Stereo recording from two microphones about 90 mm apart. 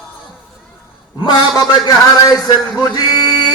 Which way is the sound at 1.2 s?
50° left (ahead or behind).